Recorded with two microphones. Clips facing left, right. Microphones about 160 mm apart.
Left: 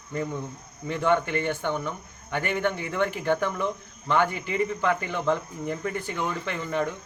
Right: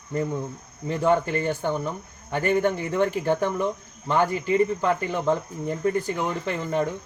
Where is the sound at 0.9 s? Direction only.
35° right (ahead or behind).